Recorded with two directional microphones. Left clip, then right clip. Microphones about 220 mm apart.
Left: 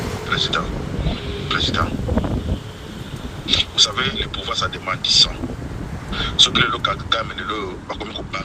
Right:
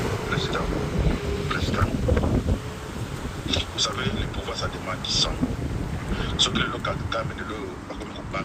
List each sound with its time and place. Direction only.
0.3 s speech: 30° left (ahead or behind)
2.1 s wind noise: centre (ahead or behind)
3.4 s speech: 35° left (ahead or behind)